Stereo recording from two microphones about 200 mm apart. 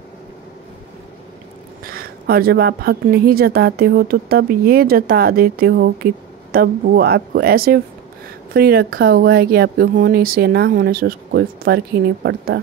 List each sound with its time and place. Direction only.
1.9 s a woman's voice: 50° right (ahead or behind)